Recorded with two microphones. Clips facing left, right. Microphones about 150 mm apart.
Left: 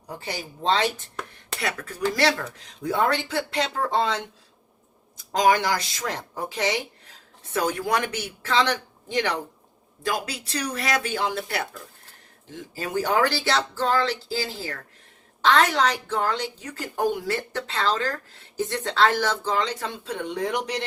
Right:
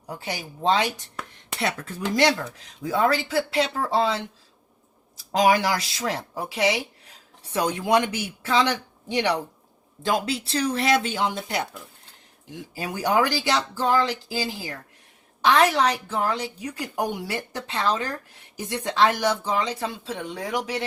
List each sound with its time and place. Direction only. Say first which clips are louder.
0.6 s a woman's voice: right 1 dB; 10° right (ahead or behind)
1.6 s speech: even; 25° right (ahead or behind)
2.8 s speech: right 1 dB; centre (ahead or behind)
5.3 s a woman's voice: right 1 dB; 10° right (ahead or behind)
10.0 s a woman's voice: right 4 dB; 25° right (ahead or behind); by 20.8 s centre (ahead or behind)